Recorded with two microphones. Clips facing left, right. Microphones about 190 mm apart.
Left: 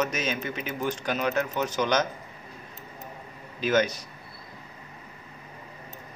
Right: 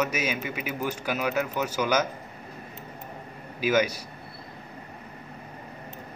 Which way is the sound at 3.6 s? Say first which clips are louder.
Even; 10° right (ahead or behind).